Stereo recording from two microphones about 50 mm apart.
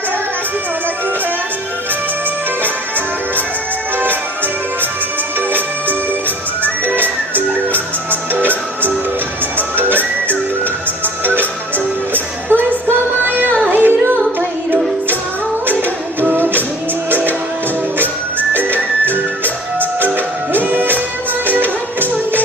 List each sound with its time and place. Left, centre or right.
7.0 s music: right
12.1 s music: right
16.2 s music: right
18.5 s music: right